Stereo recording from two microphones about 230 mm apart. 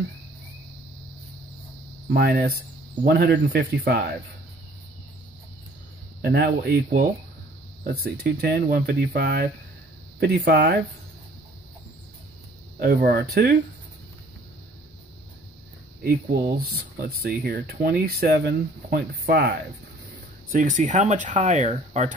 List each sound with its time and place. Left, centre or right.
2.0 s speech: right
6.2 s speech: right
12.7 s speech: right
16.0 s speech: right
20.8 s speech: right